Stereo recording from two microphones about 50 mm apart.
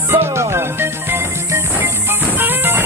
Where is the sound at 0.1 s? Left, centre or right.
Right.